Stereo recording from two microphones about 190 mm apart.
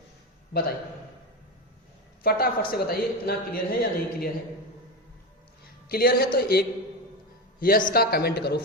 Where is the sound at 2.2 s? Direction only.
50° left (ahead or behind).